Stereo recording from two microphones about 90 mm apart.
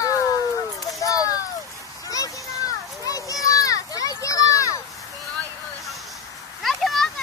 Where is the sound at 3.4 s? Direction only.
40° left (ahead or behind).